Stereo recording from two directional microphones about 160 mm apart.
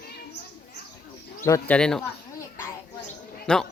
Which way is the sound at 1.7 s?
5° left (ahead or behind).